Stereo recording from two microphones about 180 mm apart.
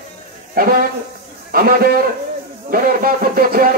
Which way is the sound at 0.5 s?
55° right (ahead or behind).